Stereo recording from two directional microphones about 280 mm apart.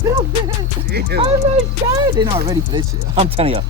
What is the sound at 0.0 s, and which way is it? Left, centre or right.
Music, centre.